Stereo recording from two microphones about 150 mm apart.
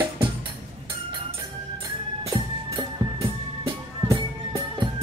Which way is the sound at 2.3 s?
30° right (ahead or behind).